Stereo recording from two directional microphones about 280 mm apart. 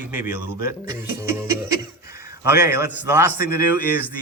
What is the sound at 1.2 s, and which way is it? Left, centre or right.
Speech, centre.